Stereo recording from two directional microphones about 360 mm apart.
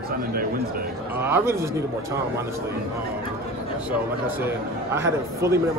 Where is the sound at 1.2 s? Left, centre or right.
Centre.